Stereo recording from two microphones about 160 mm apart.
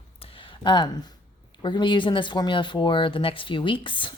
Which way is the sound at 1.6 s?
30° left (ahead or behind).